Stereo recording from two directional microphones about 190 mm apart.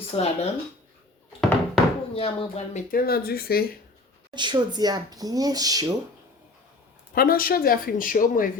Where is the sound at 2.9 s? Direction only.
50° left (ahead or behind).